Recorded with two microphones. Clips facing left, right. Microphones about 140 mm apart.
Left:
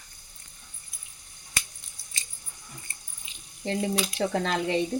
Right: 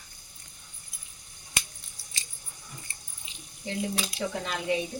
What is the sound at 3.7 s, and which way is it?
Speech, 85° left.